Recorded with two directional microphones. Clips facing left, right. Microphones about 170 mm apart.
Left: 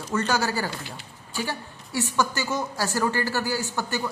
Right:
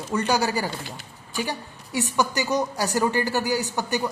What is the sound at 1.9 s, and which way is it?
A woman's voice, 20° right (ahead or behind).